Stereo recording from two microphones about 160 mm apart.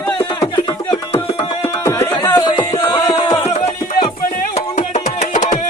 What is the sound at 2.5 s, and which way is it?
Music, 30° left (ahead or behind).